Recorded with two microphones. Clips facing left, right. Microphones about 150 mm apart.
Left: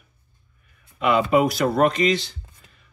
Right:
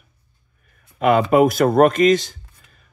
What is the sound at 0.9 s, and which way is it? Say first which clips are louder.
Speech: right 4 dB; 45° right (ahead or behind).